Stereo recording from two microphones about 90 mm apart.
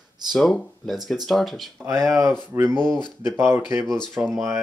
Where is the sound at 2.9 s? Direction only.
55° left (ahead or behind).